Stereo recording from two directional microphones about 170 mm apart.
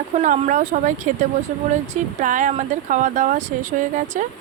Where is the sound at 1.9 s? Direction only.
50° right (ahead or behind).